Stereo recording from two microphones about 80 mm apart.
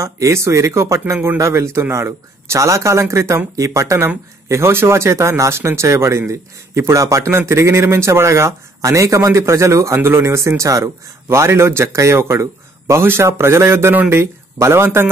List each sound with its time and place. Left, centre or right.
0.0 s speech: right